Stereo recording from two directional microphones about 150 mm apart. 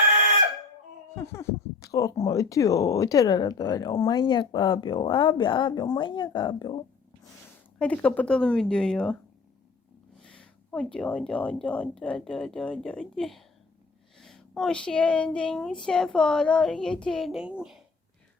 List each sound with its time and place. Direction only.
1.1 s speech: 20° left (ahead or behind)
7.8 s speech: 10° left (ahead or behind)
10.2 s speech: 5° left (ahead or behind)